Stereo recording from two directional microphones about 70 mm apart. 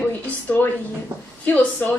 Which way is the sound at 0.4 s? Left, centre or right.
Left.